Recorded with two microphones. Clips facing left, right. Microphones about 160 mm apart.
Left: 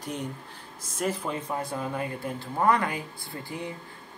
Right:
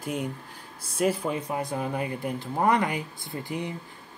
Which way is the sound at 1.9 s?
20° right (ahead or behind).